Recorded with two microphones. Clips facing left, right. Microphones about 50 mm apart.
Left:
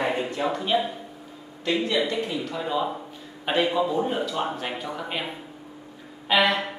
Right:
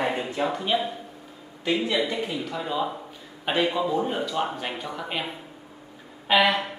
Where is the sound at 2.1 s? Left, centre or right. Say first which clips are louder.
Left 1 dB; centre.